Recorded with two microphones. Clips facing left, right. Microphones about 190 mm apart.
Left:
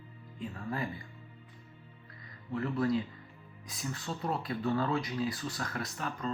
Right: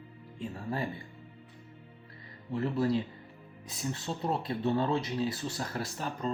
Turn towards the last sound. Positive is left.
turn(degrees=-30)  # may be behind; listen again after turning